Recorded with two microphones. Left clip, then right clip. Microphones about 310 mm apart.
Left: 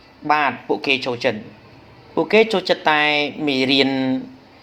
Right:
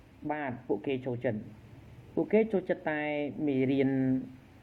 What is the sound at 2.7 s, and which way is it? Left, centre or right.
Speech, left.